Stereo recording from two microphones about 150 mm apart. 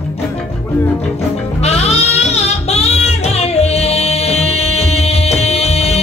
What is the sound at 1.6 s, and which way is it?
Music, 45° left (ahead or behind).